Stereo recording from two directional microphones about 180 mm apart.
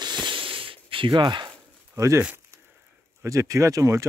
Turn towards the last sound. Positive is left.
turn(degrees=-15)  # may be behind; listen again after turning